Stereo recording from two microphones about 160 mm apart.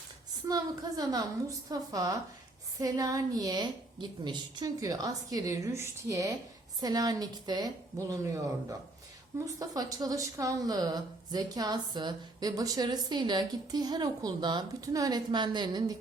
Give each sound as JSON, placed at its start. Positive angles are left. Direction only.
{"t": 0.4, "sound": "speech", "side_deg": -25}